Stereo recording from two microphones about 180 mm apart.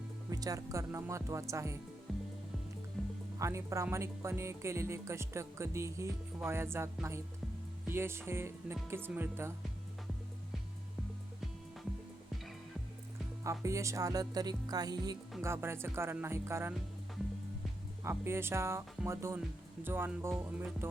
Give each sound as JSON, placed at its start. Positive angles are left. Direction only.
{"t": 0.3, "sound": "speech", "side_deg": -20}
{"t": 2.1, "sound": "music", "side_deg": 0}
{"t": 3.3, "sound": "speech", "side_deg": -15}
{"t": 13.4, "sound": "speech", "side_deg": -15}
{"t": 18.0, "sound": "speech", "side_deg": -15}